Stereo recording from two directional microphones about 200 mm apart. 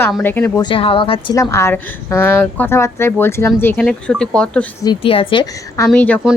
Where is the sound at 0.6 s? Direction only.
25° left (ahead or behind).